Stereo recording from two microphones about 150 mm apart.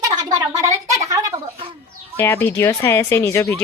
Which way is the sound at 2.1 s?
15° left (ahead or behind).